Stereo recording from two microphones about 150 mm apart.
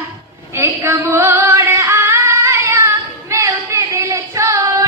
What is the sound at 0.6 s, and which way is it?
Female singing, 20° right (ahead or behind).